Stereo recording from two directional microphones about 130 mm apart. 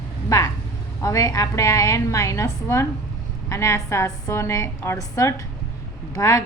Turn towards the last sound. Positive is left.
turn(degrees=25)  # may be behind; listen again after turning